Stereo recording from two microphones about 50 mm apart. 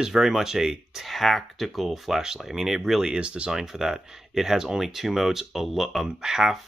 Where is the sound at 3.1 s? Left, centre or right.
Right.